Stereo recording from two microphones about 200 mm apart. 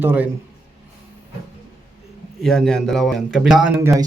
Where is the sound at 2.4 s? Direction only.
Centre (ahead or behind); by 4.0 s 15° right (ahead or behind).